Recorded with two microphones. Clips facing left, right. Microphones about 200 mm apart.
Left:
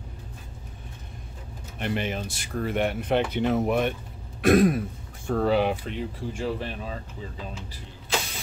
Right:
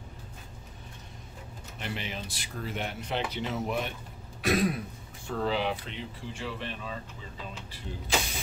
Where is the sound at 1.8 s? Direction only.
55° left (ahead or behind).